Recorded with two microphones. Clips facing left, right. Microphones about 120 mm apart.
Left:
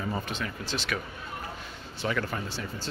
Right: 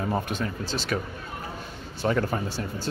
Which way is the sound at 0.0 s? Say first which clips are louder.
Right 5 dB; 50° right (ahead or behind).